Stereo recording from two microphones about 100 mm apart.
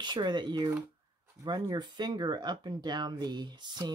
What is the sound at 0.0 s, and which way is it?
Speech, 50° right (ahead or behind).